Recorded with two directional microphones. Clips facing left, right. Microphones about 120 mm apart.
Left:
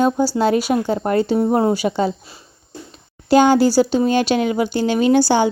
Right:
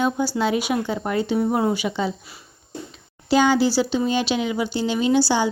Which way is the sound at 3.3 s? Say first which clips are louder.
Left 5 dB; 50° left (ahead or behind).